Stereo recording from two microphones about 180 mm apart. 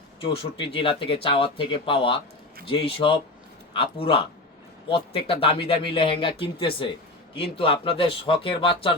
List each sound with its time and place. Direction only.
0.2 s speech: 30° left (ahead or behind)